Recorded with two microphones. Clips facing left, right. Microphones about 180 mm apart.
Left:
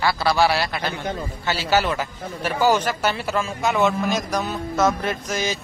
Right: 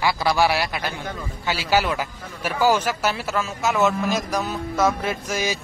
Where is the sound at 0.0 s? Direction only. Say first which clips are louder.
Left 1 dB; 15° right (ahead or behind).